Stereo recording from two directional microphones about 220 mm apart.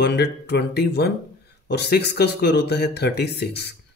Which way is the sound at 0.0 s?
50° left (ahead or behind).